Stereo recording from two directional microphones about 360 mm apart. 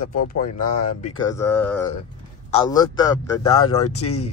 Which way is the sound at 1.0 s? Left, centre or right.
Centre.